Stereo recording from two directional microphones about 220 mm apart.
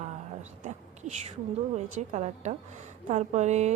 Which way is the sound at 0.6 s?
30° right (ahead or behind).